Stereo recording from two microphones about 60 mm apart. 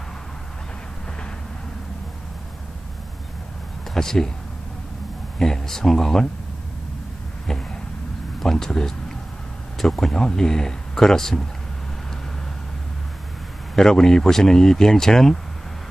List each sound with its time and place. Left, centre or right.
3.9 s speech: centre
5.4 s speech: centre
8.4 s speech: centre
13.7 s speech: centre